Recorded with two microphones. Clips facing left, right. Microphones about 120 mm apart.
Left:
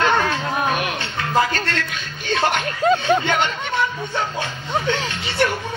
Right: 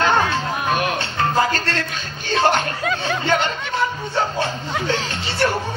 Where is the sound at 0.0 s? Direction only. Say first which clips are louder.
Right 1 dB; 35° right (ahead or behind).